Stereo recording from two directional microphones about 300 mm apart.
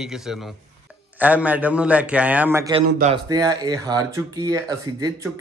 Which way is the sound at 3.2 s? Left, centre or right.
Centre.